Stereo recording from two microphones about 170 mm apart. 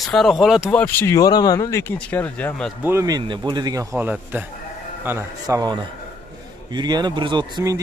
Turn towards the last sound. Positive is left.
turn(degrees=-25)  # may be behind; listen again after turning